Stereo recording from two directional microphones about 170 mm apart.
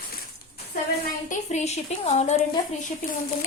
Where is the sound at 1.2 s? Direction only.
40° left (ahead or behind).